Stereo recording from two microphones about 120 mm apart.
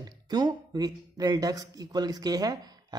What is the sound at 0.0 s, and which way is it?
Speech, 35° right (ahead or behind).